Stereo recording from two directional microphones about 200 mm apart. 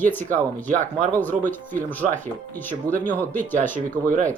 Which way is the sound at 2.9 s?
10° left (ahead or behind).